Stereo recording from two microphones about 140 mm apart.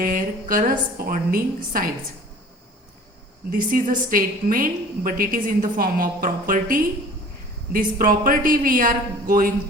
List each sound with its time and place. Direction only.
0.0 s a woman's voice: 80° right
3.5 s a woman's voice: 85° right